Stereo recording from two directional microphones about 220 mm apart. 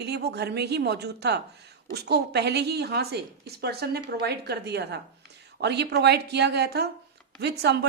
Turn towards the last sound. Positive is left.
turn(degrees=-50)  # may be behind; listen again after turning